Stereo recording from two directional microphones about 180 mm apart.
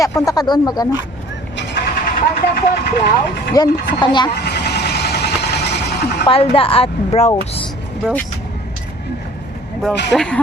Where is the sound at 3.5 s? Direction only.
25° left (ahead or behind).